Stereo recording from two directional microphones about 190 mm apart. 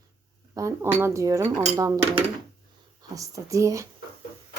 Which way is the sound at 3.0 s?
15° right (ahead or behind).